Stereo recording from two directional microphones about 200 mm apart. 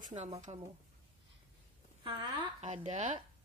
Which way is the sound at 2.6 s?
35° right (ahead or behind).